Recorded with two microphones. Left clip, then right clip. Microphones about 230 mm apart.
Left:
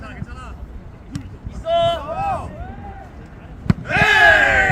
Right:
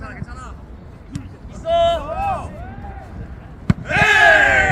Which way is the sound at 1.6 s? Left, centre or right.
Centre.